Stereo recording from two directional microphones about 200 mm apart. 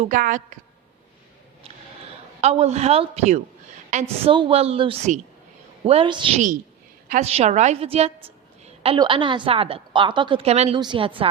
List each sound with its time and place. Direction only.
0.0 s a woman's voice: 40° right (ahead or behind)
2.4 s a woman's voice: 30° right (ahead or behind)